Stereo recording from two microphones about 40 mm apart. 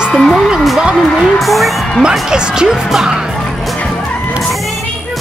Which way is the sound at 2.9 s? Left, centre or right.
Centre.